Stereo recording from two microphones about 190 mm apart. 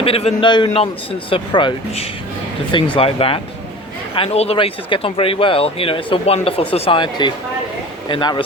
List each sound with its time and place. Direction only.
0.0 s speech: 30° left (ahead or behind)